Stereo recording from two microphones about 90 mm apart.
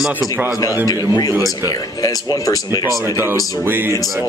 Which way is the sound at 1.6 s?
45° left (ahead or behind).